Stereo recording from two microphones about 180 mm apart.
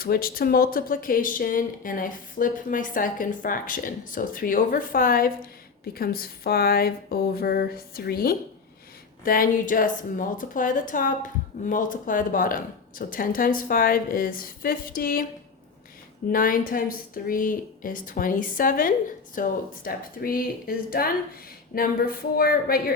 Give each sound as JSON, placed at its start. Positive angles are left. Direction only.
{"t": 0.0, "sound": "a woman's voice", "side_deg": 55}
{"t": 16.3, "sound": "a woman's voice", "side_deg": 50}